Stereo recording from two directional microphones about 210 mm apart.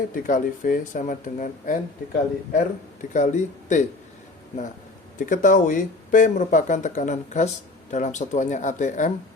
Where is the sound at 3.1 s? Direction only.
35° left (ahead or behind).